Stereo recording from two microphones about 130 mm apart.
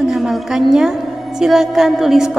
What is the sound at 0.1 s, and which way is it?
A woman's voice, centre (ahead or behind).